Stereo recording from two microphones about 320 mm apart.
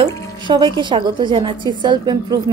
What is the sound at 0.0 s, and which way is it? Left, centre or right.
A woman's voice, centre.